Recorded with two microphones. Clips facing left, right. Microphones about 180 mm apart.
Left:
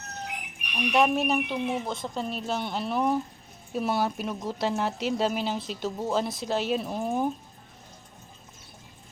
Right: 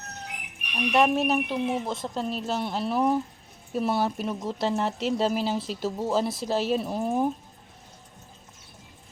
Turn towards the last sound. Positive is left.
turn(degrees=0)  # may be behind; listen again after turning